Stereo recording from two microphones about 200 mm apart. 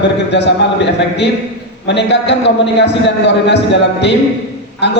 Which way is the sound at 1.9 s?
60° left (ahead or behind).